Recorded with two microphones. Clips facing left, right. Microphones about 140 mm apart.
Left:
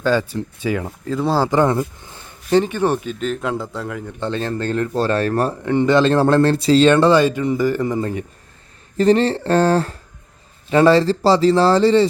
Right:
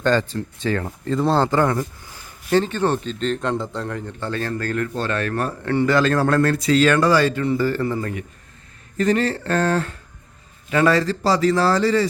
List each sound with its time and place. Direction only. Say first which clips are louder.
0.0 s speech: left 1 dB; 10° left (ahead or behind)
1.5 s speech: left 3 dB; 20° left (ahead or behind); by 4.1 s 5° left (ahead or behind)
4.2 s speech: left 4 dB; 20° left (ahead or behind)
5.6 s speech: left 3 dB; 20° left (ahead or behind)